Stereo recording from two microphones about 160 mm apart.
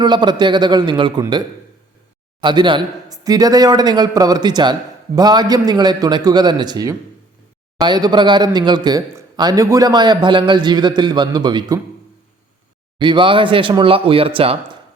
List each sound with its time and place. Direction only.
0.0 s speech: 30° right (ahead or behind)
13.0 s speech: 30° right (ahead or behind)